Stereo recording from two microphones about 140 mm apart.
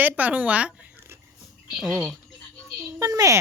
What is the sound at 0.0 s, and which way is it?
Speech, 10° right (ahead or behind).